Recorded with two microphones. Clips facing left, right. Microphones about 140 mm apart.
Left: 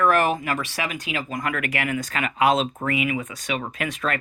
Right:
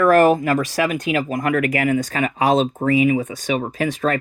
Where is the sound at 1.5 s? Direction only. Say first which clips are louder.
Right 10 dB; 40° right (ahead or behind).